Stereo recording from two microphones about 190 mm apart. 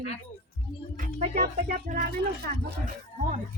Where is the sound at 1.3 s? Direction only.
45° right (ahead or behind).